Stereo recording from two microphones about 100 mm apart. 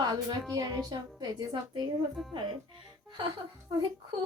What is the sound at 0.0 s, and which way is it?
A woman's voice, 45° right (ahead or behind).